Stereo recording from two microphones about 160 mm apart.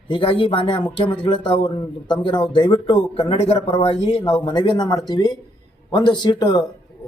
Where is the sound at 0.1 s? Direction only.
35° left (ahead or behind).